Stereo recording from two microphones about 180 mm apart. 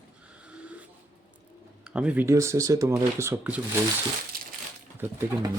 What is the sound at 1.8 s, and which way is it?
Speech, 5° right (ahead or behind).